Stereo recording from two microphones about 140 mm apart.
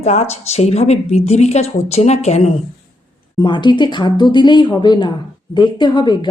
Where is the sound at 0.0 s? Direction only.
50° left (ahead or behind).